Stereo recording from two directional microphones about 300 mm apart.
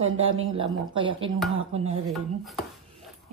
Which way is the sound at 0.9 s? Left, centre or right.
Centre.